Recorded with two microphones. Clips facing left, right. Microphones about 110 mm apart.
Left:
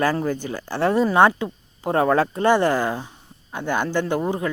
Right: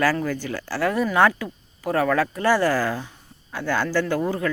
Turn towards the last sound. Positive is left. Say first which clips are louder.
# even
turn(degrees=20)  # may be behind; listen again after turning